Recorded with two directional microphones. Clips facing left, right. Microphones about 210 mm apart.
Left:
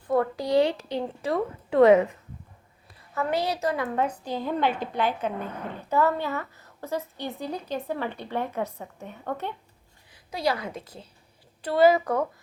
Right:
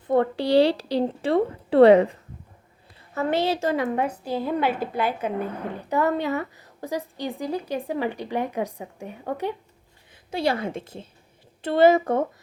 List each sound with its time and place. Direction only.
0.1 s a woman's voice: 30° right (ahead or behind)
3.2 s a woman's voice: 25° right (ahead or behind)
3.8 s a woman's voice: 10° right (ahead or behind)
10.3 s a woman's voice: 25° right (ahead or behind)